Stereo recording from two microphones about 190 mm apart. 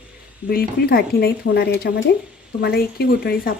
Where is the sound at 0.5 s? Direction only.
55° left (ahead or behind).